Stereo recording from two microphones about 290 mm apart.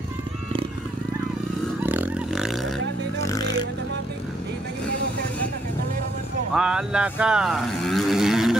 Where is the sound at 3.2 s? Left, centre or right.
Centre.